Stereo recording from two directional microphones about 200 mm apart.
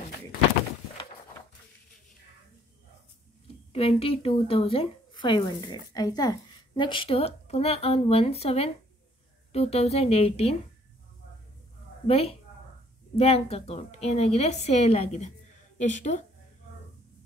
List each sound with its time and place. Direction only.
3.7 s a woman's voice: 30° left (ahead or behind)
12.1 s a woman's voice: 30° left (ahead or behind)